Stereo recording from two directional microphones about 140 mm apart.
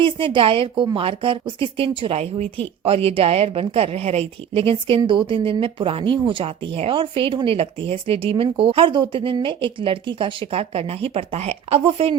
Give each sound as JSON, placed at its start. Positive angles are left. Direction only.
{"t": 0.0, "sound": "a woman's voice", "side_deg": -40}